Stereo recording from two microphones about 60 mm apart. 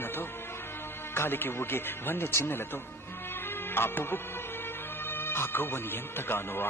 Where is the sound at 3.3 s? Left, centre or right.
Left.